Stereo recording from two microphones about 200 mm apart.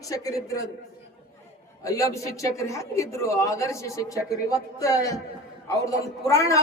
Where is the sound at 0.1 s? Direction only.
15° left (ahead or behind).